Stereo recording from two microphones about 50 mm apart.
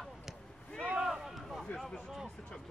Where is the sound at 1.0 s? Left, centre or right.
Centre.